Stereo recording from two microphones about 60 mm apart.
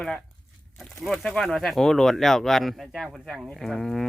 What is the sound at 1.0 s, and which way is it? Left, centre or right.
Speech, centre.